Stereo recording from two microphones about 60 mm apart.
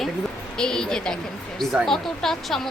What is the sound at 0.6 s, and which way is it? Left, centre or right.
A woman's voice, centre.